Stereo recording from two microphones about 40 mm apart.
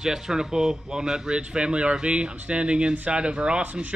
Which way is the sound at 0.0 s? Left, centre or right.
Centre.